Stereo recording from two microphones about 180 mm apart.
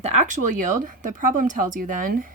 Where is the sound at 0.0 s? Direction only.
40° right (ahead or behind).